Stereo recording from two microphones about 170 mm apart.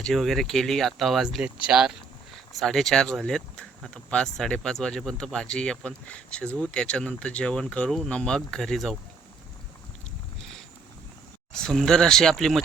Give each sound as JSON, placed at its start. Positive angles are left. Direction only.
{"t": 0.0, "sound": "speech", "side_deg": 0}
{"t": 11.5, "sound": "speech", "side_deg": 5}